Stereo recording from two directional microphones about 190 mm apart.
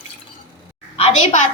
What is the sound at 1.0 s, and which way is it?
Speech, 35° left (ahead or behind).